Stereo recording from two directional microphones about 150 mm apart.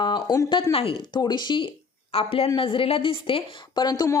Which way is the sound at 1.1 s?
30° left (ahead or behind).